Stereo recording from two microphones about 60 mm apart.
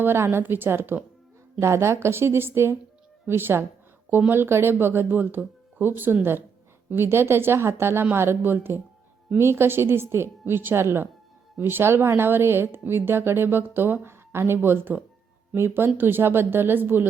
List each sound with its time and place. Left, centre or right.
0.0 s speech: right
1.6 s a woman's voice: right